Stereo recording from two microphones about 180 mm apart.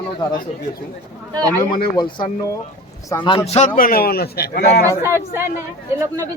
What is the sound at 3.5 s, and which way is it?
Speech, 45° left (ahead or behind).